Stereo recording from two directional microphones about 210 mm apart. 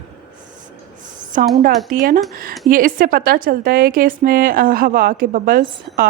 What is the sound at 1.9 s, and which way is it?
A woman's voice, 40° right (ahead or behind).